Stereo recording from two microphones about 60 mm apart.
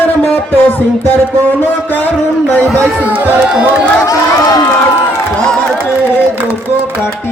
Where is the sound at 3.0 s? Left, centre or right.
Right.